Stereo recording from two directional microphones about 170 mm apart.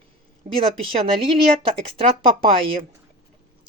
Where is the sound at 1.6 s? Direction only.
30° right (ahead or behind).